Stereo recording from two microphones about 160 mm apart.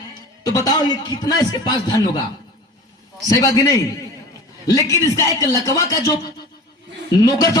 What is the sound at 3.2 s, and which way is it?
A man's voice, 20° left (ahead or behind).